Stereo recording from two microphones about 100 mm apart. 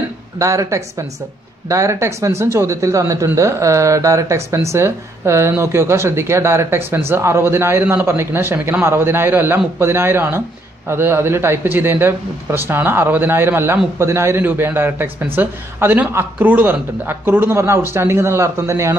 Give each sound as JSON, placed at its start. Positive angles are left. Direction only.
{"t": 0.4, "sound": "speech", "side_deg": -30}